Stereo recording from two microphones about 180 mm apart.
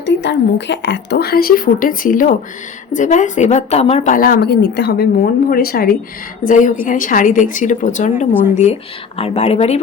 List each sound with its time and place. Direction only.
0.0 s a woman's voice: 85° left; by 4.2 s 35° left (ahead or behind)
4.2 s a woman's voice: 60° left (ahead or behind); by 9.8 s 35° left (ahead or behind)